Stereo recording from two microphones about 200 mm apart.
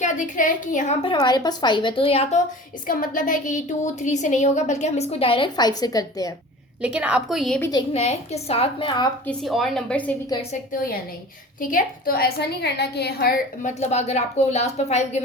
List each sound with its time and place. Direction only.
0.0 s a woman's voice: 40° left (ahead or behind)
1.0 s a woman's voice: 25° left (ahead or behind)
2.8 s a woman's voice: 40° left (ahead or behind); by 6.3 s 20° left (ahead or behind)
6.8 s a woman's voice: 5° right (ahead or behind)
7.7 s a woman's voice: 25° left (ahead or behind)
9.2 s a woman's voice: centre (ahead or behind)
10.5 s a woman's voice: 45° left (ahead or behind)